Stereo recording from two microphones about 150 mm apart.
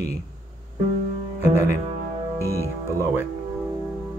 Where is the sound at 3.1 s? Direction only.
10° right (ahead or behind).